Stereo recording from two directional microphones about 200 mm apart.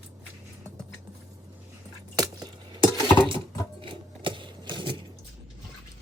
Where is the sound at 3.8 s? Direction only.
25° right (ahead or behind).